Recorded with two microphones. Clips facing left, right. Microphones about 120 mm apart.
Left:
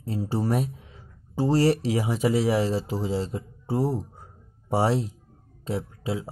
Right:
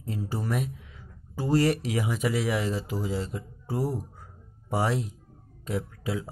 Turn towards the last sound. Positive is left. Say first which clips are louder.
# left 2 dB
turn(degrees=30)  # may be behind; listen again after turning